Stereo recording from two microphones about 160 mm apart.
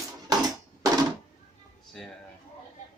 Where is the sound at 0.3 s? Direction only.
25° right (ahead or behind).